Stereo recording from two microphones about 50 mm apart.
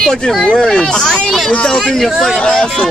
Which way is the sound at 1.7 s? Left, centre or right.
Centre.